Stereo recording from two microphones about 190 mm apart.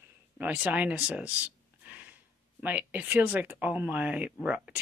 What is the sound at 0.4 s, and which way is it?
Speech, 10° right (ahead or behind).